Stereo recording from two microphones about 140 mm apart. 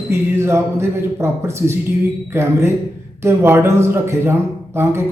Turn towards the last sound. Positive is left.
turn(degrees=-20)  # may be behind; listen again after turning